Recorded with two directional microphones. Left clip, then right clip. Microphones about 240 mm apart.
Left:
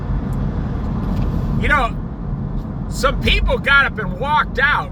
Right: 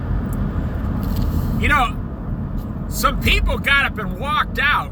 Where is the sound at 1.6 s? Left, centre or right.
Centre.